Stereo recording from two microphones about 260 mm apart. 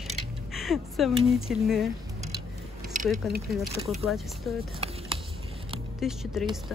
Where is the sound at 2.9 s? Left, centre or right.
Right.